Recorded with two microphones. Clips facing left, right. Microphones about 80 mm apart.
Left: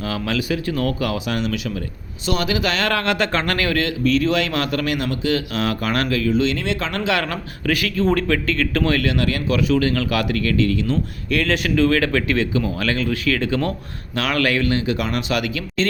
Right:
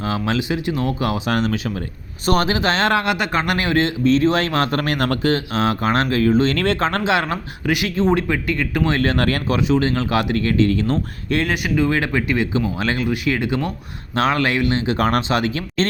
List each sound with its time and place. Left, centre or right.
0.0 s speech: right
1.3 s speech: right
3.0 s speech: centre; by 5.3 s right
5.3 s speech: right
7.0 s speech: right
9.0 s speech: right
9.6 s speech: right
11.5 s speech: centre
14.2 s speech: right
14.9 s speech: right
15.3 s speech: right